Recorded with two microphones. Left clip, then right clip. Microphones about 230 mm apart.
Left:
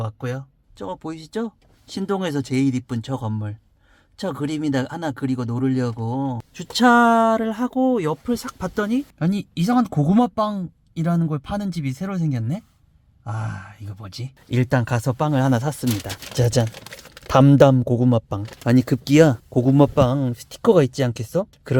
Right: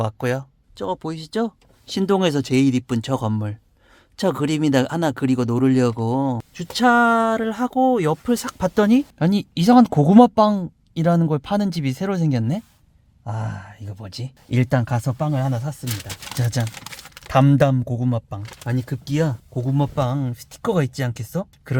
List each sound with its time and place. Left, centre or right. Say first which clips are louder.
0.0 s speech: right 7 dB; right
0.8 s speech: right 4 dB; right
6.3 s speech: even; centre
14.5 s speech: even; centre; by 15.8 s left
16.4 s speech: left 8 dB; left
18.6 s speech: left 10 dB; left; by 21.8 s centre